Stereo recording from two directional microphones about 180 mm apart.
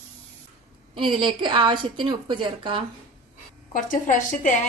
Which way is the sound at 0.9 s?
25° right (ahead or behind).